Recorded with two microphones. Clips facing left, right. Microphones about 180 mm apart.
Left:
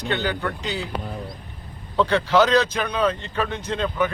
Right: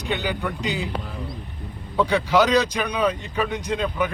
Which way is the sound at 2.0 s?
15° right (ahead or behind).